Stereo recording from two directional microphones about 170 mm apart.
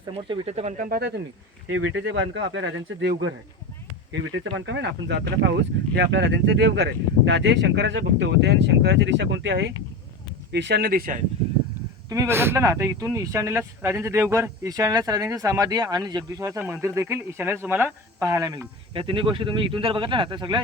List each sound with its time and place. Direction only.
0.1 s speech: 35° right (ahead or behind)
0.9 s speech: 70° right (ahead or behind)
2.0 s speech: 90° right; by 11.2 s 60° right (ahead or behind)
12.0 s speech: 20° right (ahead or behind)
18.9 s speech: 30° right (ahead or behind)